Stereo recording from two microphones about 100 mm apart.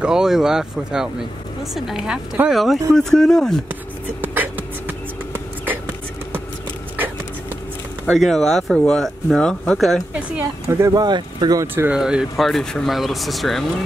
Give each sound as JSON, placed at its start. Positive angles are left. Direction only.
{"t": 0.0, "sound": "speech", "side_deg": -5}
{"t": 4.2, "sound": "beatboxing", "side_deg": -20}
{"t": 8.1, "sound": "speech", "side_deg": 5}
{"t": 10.1, "sound": "speech", "side_deg": -15}
{"t": 10.7, "sound": "speech", "side_deg": -30}
{"t": 11.0, "sound": "speech", "side_deg": -45}
{"t": 11.6, "sound": "speech", "side_deg": -20}
{"t": 11.9, "sound": "speech", "side_deg": -10}